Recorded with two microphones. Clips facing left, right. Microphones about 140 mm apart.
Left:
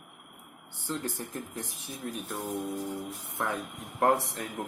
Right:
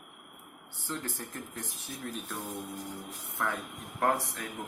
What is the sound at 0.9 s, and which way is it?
Speech, 15° left (ahead or behind).